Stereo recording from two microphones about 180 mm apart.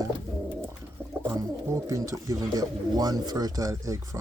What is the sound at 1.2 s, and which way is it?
Speech, 15° right (ahead or behind).